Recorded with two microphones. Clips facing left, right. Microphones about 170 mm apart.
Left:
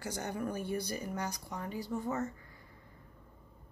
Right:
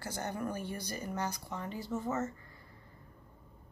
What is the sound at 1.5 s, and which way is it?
Speech, 10° left (ahead or behind).